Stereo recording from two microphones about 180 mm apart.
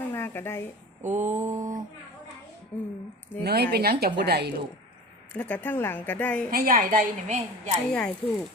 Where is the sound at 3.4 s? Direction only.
60° right (ahead or behind).